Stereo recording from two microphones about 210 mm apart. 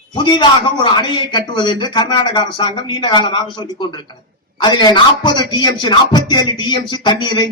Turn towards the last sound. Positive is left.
turn(degrees=20)  # may be behind; listen again after turning